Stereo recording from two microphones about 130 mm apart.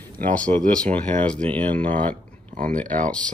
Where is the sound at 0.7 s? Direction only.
10° left (ahead or behind).